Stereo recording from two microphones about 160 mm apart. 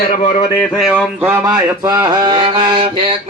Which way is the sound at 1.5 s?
25° right (ahead or behind).